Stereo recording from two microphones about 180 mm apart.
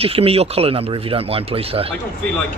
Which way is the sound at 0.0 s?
30° right (ahead or behind).